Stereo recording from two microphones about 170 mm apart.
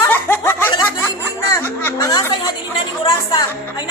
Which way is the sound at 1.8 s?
20° left (ahead or behind).